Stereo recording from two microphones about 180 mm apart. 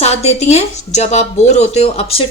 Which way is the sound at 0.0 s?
35° left (ahead or behind).